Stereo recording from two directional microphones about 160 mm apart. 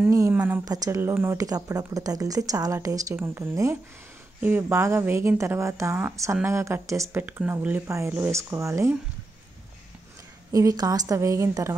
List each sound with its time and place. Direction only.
0.1 s speech: 15° right (ahead or behind)
0.7 s speech: 20° right (ahead or behind)
10.5 s speech: 20° right (ahead or behind)